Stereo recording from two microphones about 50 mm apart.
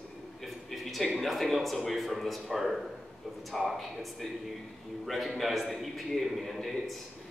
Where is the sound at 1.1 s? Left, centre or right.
Centre.